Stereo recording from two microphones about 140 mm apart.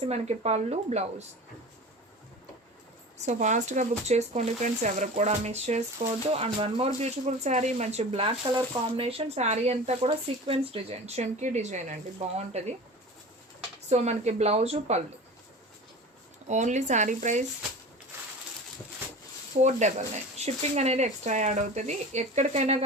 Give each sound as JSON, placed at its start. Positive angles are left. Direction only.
{"t": 0.0, "sound": "speech", "side_deg": -50}
{"t": 3.2, "sound": "speech", "side_deg": -55}
{"t": 8.5, "sound": "speech", "side_deg": -35}
{"t": 13.9, "sound": "speech", "side_deg": -50}
{"t": 16.5, "sound": "speech", "side_deg": -60}
{"t": 19.6, "sound": "speech", "side_deg": -55}